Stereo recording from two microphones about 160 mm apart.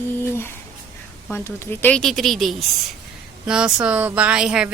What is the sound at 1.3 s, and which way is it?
Speech, 15° left (ahead or behind).